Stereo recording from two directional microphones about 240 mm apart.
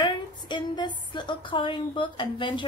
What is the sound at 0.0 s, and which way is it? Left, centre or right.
A woman's voice, centre.